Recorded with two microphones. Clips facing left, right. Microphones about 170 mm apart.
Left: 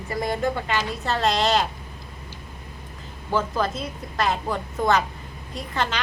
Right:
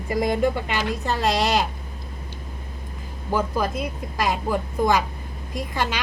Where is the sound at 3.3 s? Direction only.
10° right (ahead or behind).